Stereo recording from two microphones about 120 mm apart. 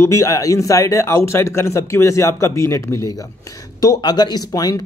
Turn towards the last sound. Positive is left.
turn(degrees=30)  # may be behind; listen again after turning